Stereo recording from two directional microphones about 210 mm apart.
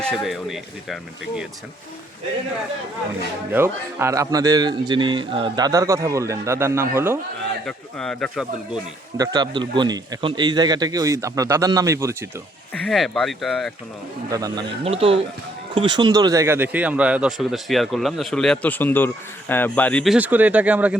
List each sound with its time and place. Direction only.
0.0 s speech: centre (ahead or behind)
3.5 s a man's voice: 10° right (ahead or behind)
7.6 s speech: 5° left (ahead or behind)
9.1 s a man's voice: 20° right (ahead or behind)
12.8 s speech: centre (ahead or behind)
14.3 s a man's voice: 15° right (ahead or behind)
14.8 s speech: 30° right (ahead or behind); by 20.1 s 5° left (ahead or behind)
20.1 s a man's voice: 10° right (ahead or behind)